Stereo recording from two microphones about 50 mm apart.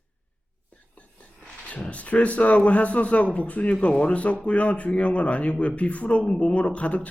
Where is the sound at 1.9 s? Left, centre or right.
Left.